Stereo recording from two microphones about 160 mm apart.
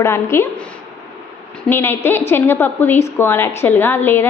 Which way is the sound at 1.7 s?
15° left (ahead or behind).